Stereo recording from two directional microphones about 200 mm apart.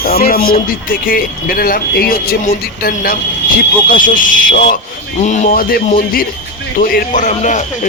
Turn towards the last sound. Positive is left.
turn(degrees=40)  # may be behind; listen again after turning